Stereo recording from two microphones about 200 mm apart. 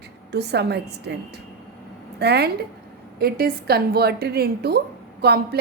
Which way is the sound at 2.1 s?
55° right (ahead or behind).